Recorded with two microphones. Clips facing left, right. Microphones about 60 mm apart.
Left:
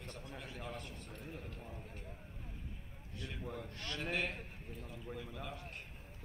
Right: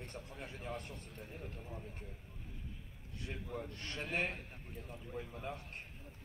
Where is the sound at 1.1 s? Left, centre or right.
Left.